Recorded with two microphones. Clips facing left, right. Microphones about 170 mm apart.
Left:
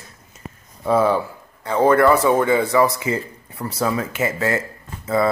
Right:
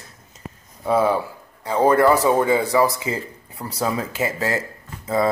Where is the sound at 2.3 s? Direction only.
15° right (ahead or behind).